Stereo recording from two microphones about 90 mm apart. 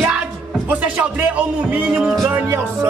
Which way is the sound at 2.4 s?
25° right (ahead or behind).